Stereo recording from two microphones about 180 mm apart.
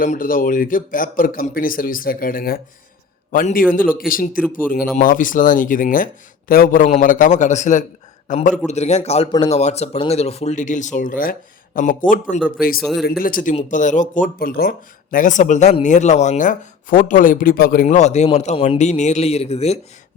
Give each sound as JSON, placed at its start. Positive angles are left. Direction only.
{"t": 0.0, "sound": "a man's voice", "side_deg": 50}
{"t": 12.8, "sound": "speech", "side_deg": 0}
{"t": 13.1, "sound": "a man's voice", "side_deg": 55}